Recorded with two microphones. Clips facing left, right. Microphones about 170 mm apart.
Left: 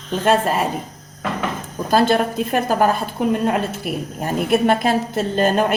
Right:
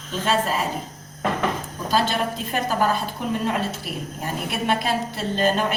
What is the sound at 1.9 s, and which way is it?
Speech, 50° left (ahead or behind).